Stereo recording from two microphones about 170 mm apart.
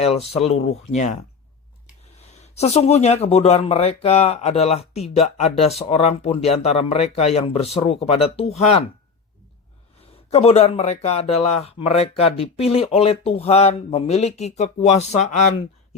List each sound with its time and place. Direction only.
0.0 s speech: 35° left (ahead or behind)
2.4 s speech: 40° left (ahead or behind)
10.3 s speech: 35° left (ahead or behind)